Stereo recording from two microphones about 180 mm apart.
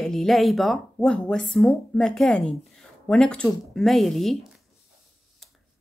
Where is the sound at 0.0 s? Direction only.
Centre (ahead or behind).